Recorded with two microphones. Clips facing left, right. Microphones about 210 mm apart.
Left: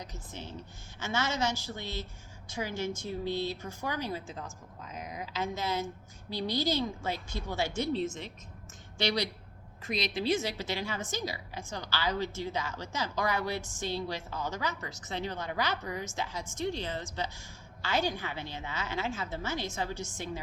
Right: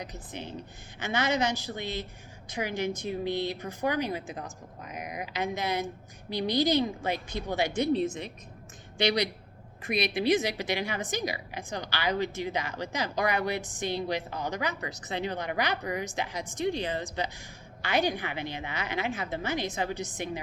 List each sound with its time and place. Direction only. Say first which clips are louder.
0.1 s a woman's voice: right 4 dB; 15° right (ahead or behind)
10.1 s a woman's voice: right 4 dB; 15° right (ahead or behind)